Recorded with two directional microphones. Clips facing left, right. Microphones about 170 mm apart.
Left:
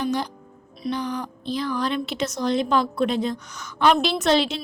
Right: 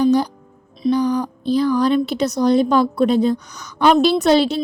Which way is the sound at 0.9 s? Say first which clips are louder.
Right 10 dB; 35° right (ahead or behind).